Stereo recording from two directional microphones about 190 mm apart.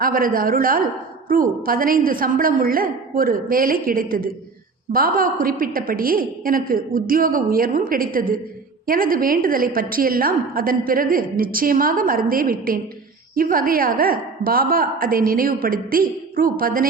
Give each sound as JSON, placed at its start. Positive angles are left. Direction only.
{"t": 0.0, "sound": "a woman's voice", "side_deg": -50}